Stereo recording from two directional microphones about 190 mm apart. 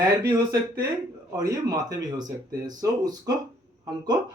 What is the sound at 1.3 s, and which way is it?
Speech, 15° right (ahead or behind).